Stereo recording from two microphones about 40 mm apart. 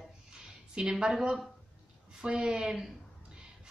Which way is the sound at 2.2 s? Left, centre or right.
Centre.